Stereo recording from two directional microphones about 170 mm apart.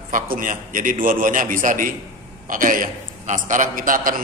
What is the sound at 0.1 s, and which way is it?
A man's voice, 50° right (ahead or behind).